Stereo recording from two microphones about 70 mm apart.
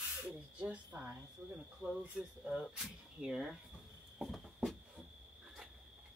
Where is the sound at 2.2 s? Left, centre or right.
Centre.